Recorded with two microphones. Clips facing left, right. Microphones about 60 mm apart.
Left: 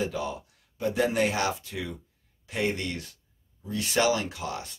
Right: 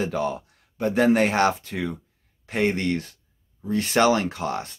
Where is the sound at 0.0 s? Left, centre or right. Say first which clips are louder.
Right 5 dB; right.